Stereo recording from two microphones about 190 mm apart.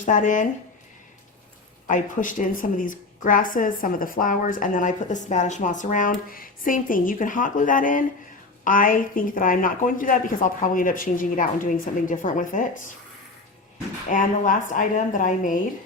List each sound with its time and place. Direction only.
0.0 s a woman's voice: 45° left (ahead or behind)
1.9 s a woman's voice: 45° left (ahead or behind)
14.1 s a woman's voice: 45° left (ahead or behind)